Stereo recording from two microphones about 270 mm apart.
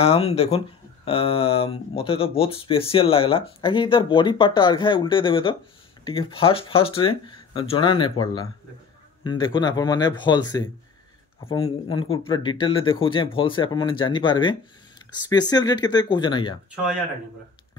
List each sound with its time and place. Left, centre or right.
0.0 s speech: left